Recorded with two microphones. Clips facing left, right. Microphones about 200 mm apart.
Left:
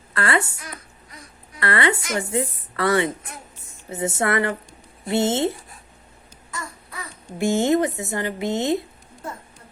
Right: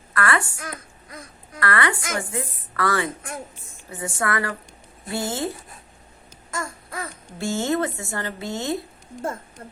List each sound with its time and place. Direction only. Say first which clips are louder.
0.1 s speech: left 1 dB; 25° left (ahead or behind)
1.5 s speech: left 2 dB; 25° left (ahead or behind)
6.5 s baby cry: right 4 dB; 45° right (ahead or behind)
7.3 s speech: left 5 dB; 20° left (ahead or behind)
9.2 s speech: right 6 dB; 50° right (ahead or behind)